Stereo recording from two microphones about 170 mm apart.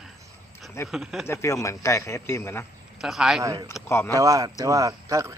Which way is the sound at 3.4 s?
20° right (ahead or behind).